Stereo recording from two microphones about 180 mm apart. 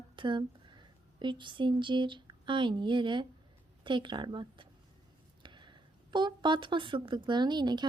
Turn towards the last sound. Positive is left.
turn(degrees=-25)  # may be behind; listen again after turning